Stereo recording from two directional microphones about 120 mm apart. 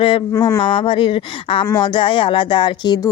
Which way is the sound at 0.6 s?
45° left (ahead or behind).